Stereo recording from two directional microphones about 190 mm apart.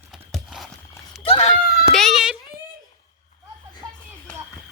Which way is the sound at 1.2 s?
30° left (ahead or behind).